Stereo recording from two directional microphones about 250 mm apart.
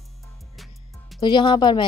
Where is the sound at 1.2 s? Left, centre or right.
Centre.